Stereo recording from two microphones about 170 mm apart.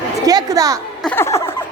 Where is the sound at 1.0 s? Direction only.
10° left (ahead or behind).